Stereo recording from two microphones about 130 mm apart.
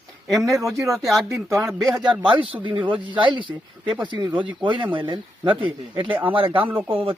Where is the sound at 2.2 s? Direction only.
45° right (ahead or behind).